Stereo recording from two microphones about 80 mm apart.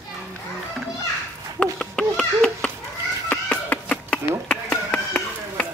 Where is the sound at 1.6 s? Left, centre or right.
Centre.